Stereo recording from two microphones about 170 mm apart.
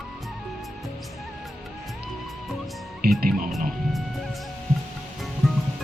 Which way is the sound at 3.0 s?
65° right (ahead or behind).